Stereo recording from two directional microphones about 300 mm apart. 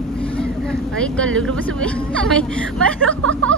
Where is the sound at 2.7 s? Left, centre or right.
Right.